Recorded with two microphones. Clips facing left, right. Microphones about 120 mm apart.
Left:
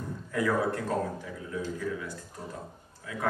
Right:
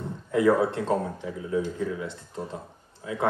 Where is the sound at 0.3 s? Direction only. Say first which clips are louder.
Right 6 dB; 25° right (ahead or behind).